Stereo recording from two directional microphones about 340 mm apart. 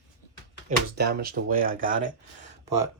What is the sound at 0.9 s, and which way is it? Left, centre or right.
Speech, right.